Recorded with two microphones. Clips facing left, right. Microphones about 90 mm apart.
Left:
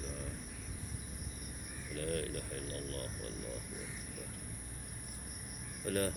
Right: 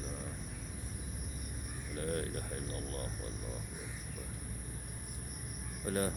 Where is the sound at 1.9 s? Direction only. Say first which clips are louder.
Right 1 dB; 25° right (ahead or behind).